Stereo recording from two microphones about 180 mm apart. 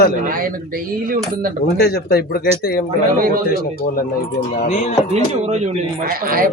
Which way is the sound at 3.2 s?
55° right (ahead or behind).